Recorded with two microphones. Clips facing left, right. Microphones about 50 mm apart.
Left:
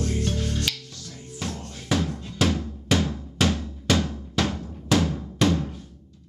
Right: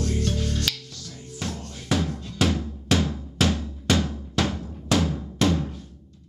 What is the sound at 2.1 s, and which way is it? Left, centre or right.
Music, left.